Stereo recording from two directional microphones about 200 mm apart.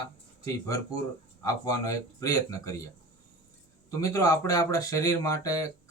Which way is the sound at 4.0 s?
15° left (ahead or behind).